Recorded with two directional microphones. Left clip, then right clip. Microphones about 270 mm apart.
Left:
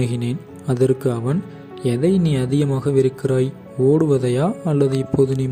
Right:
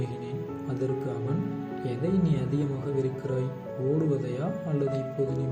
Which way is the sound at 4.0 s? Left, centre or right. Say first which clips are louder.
Left 12 dB; left.